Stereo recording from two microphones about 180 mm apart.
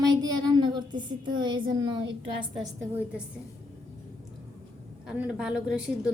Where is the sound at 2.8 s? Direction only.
10° right (ahead or behind).